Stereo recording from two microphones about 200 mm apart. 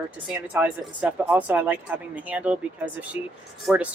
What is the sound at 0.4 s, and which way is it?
Speech, 5° right (ahead or behind).